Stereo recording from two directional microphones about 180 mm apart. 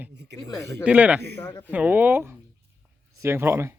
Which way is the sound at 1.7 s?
10° right (ahead or behind).